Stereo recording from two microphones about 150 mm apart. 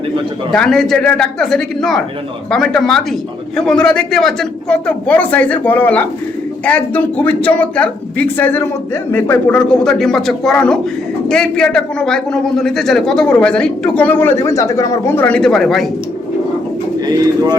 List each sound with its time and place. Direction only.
0.5 s a man's voice: 5° left (ahead or behind)
17.1 s speech: 25° right (ahead or behind)